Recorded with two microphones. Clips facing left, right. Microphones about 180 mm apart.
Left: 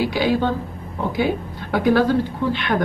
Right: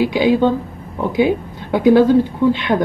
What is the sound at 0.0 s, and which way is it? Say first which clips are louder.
A woman's voice: right 5 dB; 20° right (ahead or behind).